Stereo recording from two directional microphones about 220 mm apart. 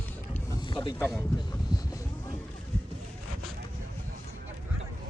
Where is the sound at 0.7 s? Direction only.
20° left (ahead or behind).